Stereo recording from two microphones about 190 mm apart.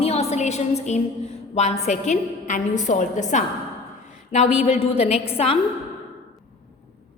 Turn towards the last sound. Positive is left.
turn(degrees=30)  # may be behind; listen again after turning